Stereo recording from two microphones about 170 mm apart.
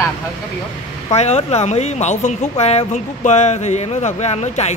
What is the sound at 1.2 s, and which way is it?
A woman's voice, 40° left (ahead or behind).